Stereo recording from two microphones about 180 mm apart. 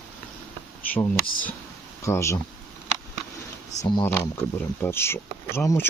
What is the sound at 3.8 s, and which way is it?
Speech, 20° left (ahead or behind).